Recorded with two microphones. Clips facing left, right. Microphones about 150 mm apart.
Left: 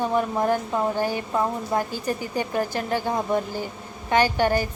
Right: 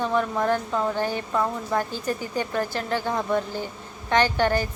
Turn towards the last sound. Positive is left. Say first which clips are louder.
# left 1 dB
turn(degrees=15)  # may be behind; listen again after turning